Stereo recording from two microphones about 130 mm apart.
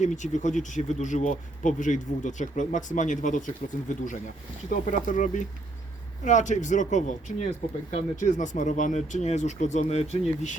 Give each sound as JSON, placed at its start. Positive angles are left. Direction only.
{"t": 0.0, "sound": "speech", "side_deg": 70}
{"t": 4.7, "sound": "speech", "side_deg": 90}
{"t": 5.0, "sound": "speech", "side_deg": 75}